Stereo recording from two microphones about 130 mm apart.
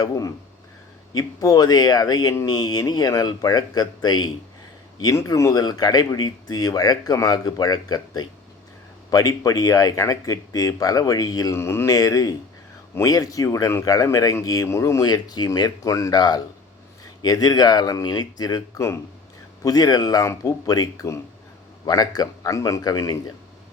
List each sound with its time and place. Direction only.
1.1 s speech: 30° left (ahead or behind)